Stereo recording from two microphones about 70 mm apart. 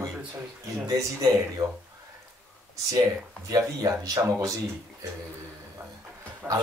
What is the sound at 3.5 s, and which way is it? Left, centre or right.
Speech, right.